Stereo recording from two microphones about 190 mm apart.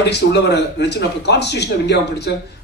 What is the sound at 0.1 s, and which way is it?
A man's voice, 65° left (ahead or behind).